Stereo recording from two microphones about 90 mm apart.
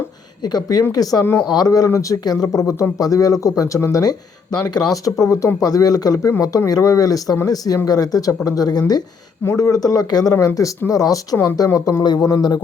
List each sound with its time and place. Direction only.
0.4 s speech: 50° left (ahead or behind)
1.2 s speech: 25° left (ahead or behind)
1.5 s speech: 45° left (ahead or behind)
4.5 s speech: 45° left (ahead or behind)